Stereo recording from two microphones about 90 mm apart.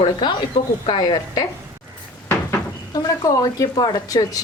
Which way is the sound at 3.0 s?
40° left (ahead or behind).